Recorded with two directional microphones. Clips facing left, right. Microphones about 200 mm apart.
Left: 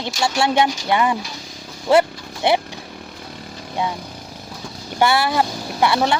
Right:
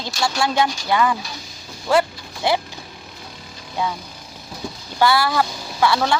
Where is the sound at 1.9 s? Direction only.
25° left (ahead or behind).